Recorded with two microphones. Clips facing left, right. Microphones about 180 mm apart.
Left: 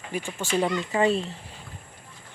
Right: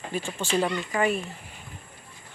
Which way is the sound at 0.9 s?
25° left (ahead or behind).